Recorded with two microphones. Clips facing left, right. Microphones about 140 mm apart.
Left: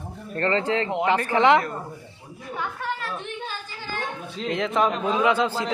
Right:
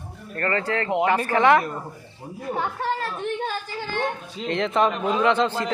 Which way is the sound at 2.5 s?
40° right (ahead or behind).